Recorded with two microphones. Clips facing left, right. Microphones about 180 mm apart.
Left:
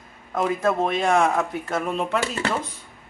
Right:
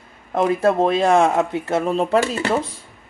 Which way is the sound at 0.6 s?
35° right (ahead or behind).